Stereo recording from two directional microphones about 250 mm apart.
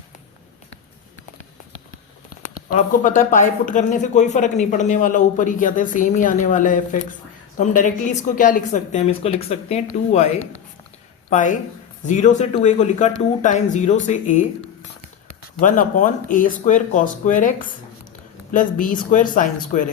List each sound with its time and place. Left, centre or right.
2.6 s a woman's voice: left
15.6 s speech: left